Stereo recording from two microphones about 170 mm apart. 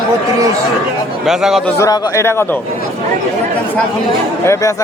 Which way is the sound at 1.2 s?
Centre (ahead or behind).